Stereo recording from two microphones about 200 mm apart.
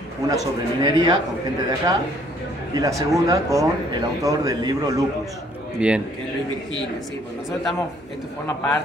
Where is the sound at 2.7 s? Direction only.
15° right (ahead or behind).